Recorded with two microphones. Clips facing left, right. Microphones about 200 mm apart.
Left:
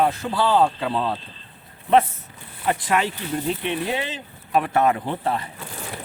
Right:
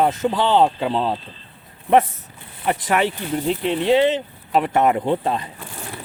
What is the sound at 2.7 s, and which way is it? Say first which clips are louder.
Speech: right 2 dB; 20° right (ahead or behind).